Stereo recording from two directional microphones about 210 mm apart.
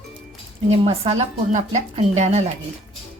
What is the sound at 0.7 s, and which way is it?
A woman's voice, 30° right (ahead or behind).